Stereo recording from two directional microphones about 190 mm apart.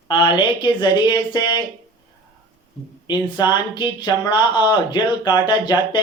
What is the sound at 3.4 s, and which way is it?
Speech, 25° left (ahead or behind).